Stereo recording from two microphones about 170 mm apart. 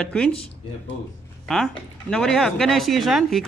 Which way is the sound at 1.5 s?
5° left (ahead or behind).